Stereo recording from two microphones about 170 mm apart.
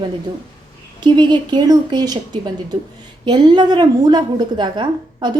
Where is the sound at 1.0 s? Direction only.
25° right (ahead or behind).